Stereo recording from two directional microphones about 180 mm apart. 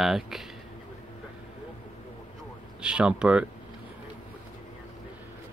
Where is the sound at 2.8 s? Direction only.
5° right (ahead or behind).